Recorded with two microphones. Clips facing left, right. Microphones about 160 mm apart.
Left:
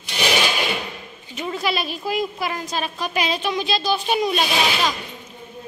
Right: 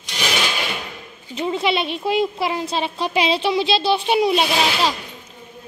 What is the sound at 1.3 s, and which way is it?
A woman's voice, 25° right (ahead or behind).